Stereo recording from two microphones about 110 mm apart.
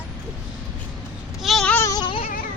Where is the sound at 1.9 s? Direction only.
35° left (ahead or behind).